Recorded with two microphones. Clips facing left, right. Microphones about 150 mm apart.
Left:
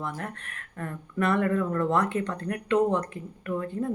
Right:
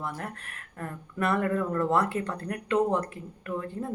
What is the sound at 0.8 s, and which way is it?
Speech, 5° right (ahead or behind).